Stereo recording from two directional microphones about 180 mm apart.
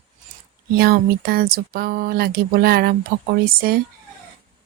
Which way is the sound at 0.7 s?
55° right (ahead or behind).